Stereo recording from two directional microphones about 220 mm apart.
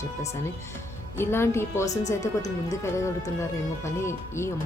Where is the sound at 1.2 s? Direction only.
10° left (ahead or behind).